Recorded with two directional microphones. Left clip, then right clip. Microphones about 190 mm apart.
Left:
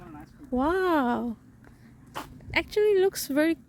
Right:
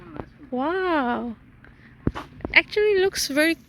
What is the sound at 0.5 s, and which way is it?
Speech, 20° left (ahead or behind).